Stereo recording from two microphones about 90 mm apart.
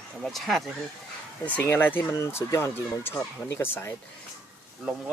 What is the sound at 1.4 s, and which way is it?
Speech, 20° left (ahead or behind).